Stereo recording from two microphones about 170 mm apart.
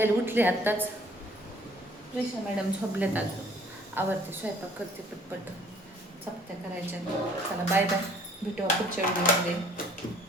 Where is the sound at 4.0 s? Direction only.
10° right (ahead or behind).